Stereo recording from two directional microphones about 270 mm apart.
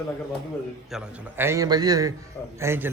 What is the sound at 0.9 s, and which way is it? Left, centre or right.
A man's voice, centre.